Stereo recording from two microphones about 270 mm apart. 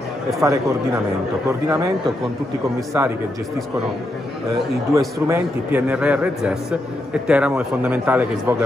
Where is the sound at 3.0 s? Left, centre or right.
Centre.